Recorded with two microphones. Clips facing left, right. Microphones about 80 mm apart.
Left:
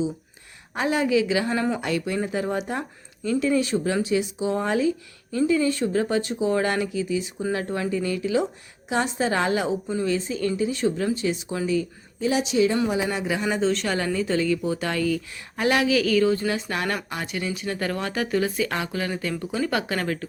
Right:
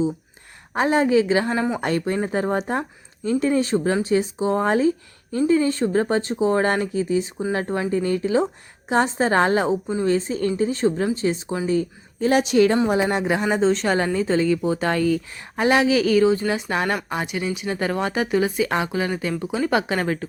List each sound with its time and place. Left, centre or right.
0.7 s speech: right
1.5 s speech: centre
1.8 s speech: right
12.3 s a woman's voice: right
13.5 s speech: right